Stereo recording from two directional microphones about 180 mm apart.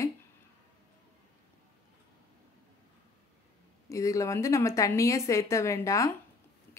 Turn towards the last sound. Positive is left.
turn(degrees=15)  # may be behind; listen again after turning